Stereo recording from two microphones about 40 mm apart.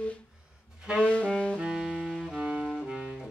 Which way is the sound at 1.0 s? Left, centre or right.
Left.